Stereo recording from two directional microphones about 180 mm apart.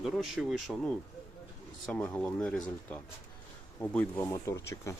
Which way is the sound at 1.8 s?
5° left (ahead or behind).